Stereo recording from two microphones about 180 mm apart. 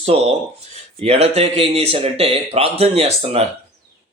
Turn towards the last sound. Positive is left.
turn(degrees=-35)  # may be behind; listen again after turning